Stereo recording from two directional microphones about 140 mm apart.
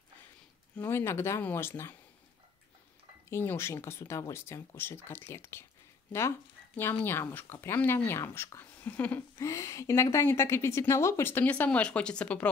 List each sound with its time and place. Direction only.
0.7 s speech: 15° left (ahead or behind)
3.3 s speech: 15° left (ahead or behind)